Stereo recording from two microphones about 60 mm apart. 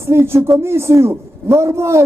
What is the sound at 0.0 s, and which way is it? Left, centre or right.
A man's voice, right.